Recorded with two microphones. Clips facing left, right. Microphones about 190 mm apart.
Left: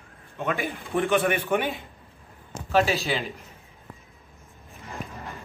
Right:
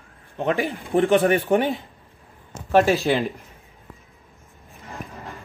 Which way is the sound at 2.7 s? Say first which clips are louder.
Right 5 dB; 50° right (ahead or behind).